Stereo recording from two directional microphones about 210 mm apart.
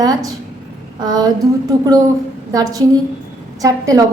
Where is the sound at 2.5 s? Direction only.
15° right (ahead or behind).